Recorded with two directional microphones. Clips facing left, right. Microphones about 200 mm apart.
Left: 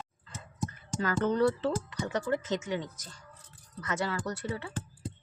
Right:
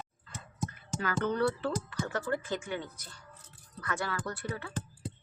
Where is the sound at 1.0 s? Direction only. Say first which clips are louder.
Left 3 dB; 35° left (ahead or behind).